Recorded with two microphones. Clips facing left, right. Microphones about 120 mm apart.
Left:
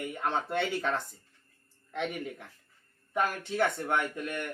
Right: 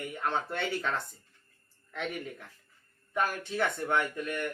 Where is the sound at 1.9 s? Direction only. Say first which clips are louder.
Left 2 dB; 15° left (ahead or behind).